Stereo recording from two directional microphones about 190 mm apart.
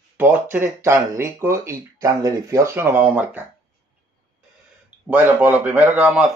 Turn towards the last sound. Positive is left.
turn(degrees=-5)  # may be behind; listen again after turning